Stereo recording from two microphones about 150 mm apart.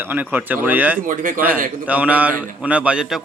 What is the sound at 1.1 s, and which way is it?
Speech, 65° right (ahead or behind).